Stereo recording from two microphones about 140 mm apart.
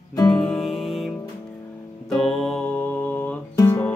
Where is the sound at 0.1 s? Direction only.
30° left (ahead or behind).